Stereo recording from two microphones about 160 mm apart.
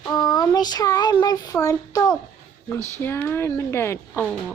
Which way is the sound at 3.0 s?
15° left (ahead or behind).